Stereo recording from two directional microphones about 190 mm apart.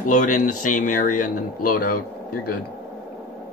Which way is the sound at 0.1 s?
40° left (ahead or behind).